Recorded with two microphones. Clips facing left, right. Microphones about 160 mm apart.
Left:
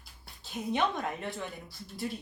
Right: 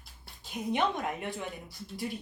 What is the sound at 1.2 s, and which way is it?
Speech, 15° right (ahead or behind).